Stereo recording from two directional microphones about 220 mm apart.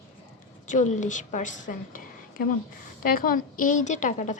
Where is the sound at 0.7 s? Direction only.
35° left (ahead or behind).